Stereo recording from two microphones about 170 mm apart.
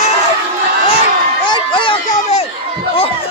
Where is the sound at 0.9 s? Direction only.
30° left (ahead or behind).